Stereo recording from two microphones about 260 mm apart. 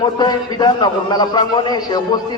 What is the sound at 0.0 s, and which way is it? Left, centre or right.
A man's voice, centre.